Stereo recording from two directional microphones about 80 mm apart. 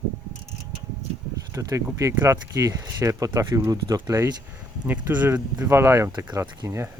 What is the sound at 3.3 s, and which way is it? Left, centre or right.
Speech, right.